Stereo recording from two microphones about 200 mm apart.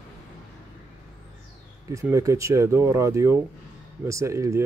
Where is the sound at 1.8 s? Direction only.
15° right (ahead or behind).